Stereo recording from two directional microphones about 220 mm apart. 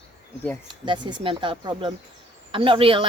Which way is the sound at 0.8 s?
20° right (ahead or behind).